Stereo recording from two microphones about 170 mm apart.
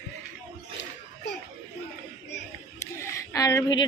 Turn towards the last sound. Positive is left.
turn(degrees=20)  # may be behind; listen again after turning